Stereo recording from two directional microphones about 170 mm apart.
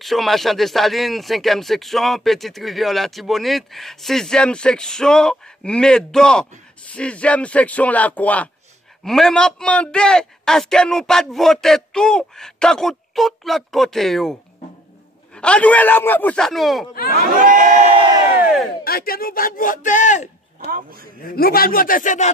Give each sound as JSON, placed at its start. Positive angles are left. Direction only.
{"t": 0.0, "sound": "speech", "side_deg": 0}
{"t": 15.3, "sound": "speech", "side_deg": 5}
{"t": 17.2, "sound": "crowd", "side_deg": -50}
{"t": 18.9, "sound": "speech", "side_deg": 60}
{"t": 20.7, "sound": "speech", "side_deg": -60}
{"t": 21.2, "sound": "a man's voice", "side_deg": 60}